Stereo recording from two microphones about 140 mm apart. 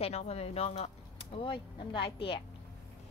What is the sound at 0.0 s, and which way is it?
Speech, 50° left (ahead or behind).